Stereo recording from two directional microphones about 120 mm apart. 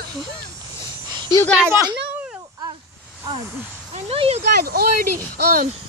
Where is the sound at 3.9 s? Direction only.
55° right (ahead or behind).